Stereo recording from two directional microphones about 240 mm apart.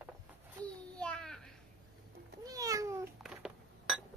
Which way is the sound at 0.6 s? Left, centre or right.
Centre.